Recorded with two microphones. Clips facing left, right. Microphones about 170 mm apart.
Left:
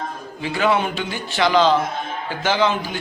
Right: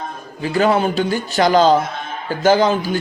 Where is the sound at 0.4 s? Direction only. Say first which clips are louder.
Right 4 dB; 40° right (ahead or behind).